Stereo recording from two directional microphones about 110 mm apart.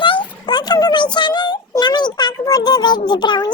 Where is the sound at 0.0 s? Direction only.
45° left (ahead or behind).